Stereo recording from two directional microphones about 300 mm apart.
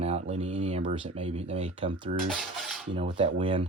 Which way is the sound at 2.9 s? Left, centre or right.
Centre.